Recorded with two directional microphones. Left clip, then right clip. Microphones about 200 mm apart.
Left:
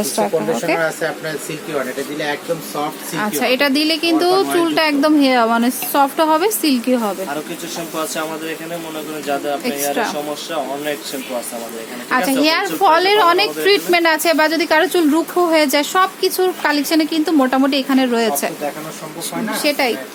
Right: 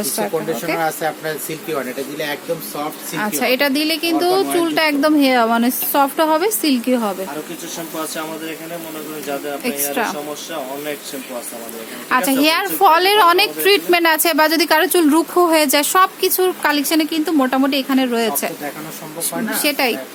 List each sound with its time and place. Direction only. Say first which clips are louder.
0.0 s speech: left 3 dB; 10° left (ahead or behind)
3.2 s speech: left 1 dB; 10° right (ahead or behind)
7.9 s speech: left 3 dB; centre (ahead or behind)
9.9 s a woman's voice: even; 15° right (ahead or behind)
12.1 s a woman's voice: even; 20° right (ahead or behind); by 18.5 s centre (ahead or behind)
19.5 s a woman's voice: left 1 dB; 15° right (ahead or behind)